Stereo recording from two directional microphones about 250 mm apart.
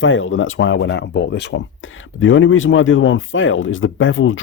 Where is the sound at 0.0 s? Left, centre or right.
Left.